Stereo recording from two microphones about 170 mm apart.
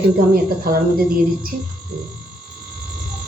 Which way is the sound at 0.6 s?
60° right (ahead or behind).